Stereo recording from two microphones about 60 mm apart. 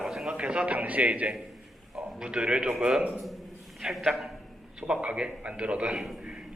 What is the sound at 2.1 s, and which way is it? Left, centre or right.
Speech, centre.